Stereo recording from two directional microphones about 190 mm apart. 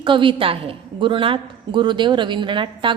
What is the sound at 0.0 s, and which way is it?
A woman's voice, 25° right (ahead or behind).